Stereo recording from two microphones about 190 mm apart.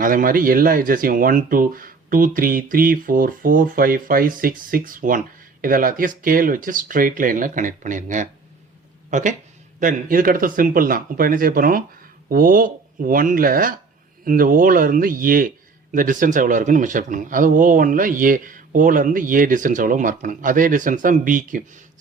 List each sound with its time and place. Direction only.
0.0 s a man's voice: 45° right (ahead or behind)